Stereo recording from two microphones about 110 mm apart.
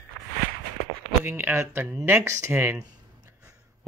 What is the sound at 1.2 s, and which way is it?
Speech, 20° right (ahead or behind).